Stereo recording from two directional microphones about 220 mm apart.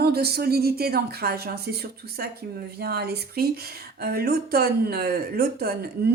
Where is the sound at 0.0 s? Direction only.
45° right (ahead or behind).